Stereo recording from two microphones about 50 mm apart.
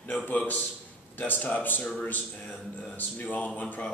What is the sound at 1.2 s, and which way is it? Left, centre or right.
Speech, left.